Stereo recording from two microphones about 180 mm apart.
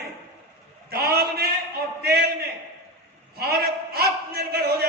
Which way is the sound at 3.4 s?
60° right (ahead or behind).